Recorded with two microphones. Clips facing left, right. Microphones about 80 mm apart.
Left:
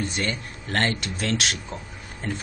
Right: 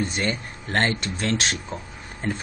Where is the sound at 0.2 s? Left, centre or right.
Right.